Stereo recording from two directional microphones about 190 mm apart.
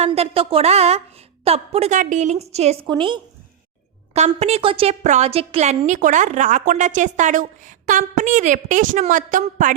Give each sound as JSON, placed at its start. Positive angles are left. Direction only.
{"t": 0.0, "sound": "a woman's voice", "side_deg": -30}
{"t": 2.8, "sound": "a woman's voice", "side_deg": -25}
{"t": 4.1, "sound": "a woman's voice", "side_deg": -35}